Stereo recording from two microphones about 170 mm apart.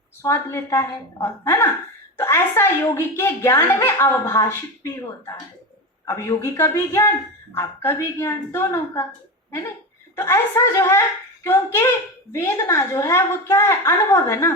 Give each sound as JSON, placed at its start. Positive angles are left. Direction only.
{"t": 0.2, "sound": "a woman's voice", "side_deg": 15}
{"t": 10.2, "sound": "a woman's voice", "side_deg": 15}